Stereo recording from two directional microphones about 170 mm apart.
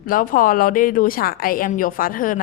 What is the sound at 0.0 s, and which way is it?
A woman's voice, 55° left (ahead or behind).